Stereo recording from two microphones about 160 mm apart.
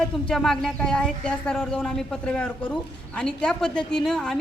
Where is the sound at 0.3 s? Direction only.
5° left (ahead or behind).